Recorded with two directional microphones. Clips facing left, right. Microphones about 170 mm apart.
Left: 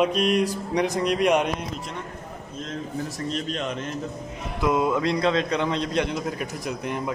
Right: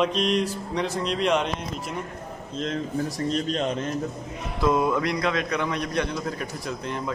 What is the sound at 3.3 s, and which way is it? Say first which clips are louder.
Speech: right 3 dB; 35° right (ahead or behind).